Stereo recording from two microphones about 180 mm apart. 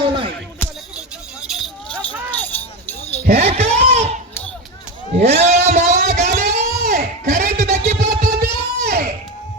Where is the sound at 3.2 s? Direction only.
40° right (ahead or behind).